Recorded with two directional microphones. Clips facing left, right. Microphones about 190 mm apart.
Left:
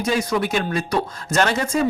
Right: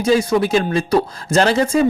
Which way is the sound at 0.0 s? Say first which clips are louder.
Right 6 dB; 30° right (ahead or behind).